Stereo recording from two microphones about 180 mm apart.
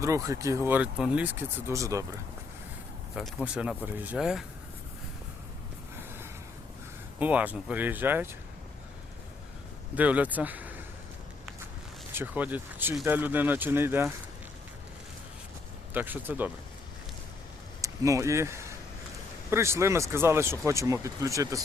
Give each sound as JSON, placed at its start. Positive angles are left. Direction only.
{"t": 0.0, "sound": "speech", "side_deg": -15}
{"t": 3.2, "sound": "speech", "side_deg": -5}
{"t": 7.2, "sound": "speech", "side_deg": -10}
{"t": 9.9, "sound": "speech", "side_deg": -10}
{"t": 12.1, "sound": "speech", "side_deg": -10}
{"t": 15.9, "sound": "speech", "side_deg": -10}
{"t": 17.7, "sound": "speech", "side_deg": -20}